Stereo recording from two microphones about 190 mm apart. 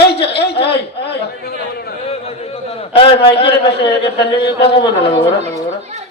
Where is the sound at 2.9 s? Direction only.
30° left (ahead or behind).